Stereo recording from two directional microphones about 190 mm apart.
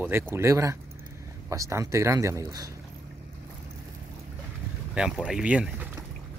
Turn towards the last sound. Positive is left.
turn(degrees=-10)  # may be behind; listen again after turning